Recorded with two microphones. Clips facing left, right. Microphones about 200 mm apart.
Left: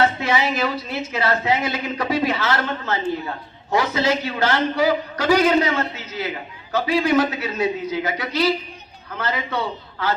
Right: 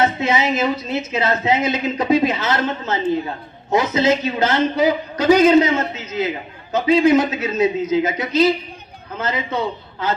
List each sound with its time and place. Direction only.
0.0 s speech: 20° right (ahead or behind)